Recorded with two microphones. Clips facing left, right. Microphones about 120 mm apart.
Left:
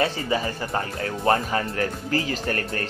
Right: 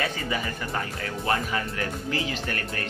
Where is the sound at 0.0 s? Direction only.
30° left (ahead or behind).